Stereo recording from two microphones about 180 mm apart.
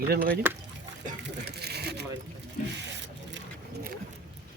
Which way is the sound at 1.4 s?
65° right (ahead or behind).